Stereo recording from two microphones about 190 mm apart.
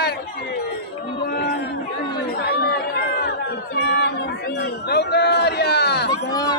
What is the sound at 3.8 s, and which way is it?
Chatter, 60° left (ahead or behind).